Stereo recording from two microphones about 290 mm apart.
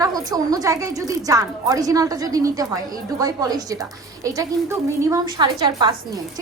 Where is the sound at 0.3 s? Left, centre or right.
Centre.